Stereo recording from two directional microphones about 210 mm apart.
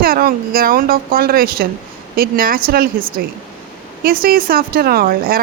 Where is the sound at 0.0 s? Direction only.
45° right (ahead or behind).